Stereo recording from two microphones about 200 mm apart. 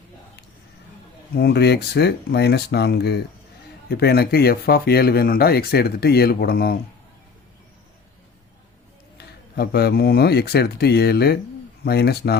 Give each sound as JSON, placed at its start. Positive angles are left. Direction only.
{"t": 1.4, "sound": "speech", "side_deg": 55}
{"t": 9.1, "sound": "speech", "side_deg": 55}